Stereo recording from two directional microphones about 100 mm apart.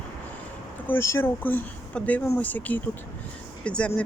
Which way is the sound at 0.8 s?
25° left (ahead or behind).